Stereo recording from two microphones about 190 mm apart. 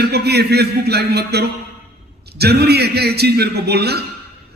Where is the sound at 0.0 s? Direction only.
60° right (ahead or behind).